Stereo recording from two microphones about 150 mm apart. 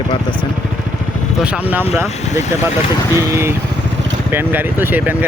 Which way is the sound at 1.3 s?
5° right (ahead or behind).